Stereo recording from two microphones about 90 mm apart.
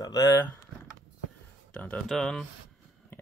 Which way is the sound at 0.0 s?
40° left (ahead or behind).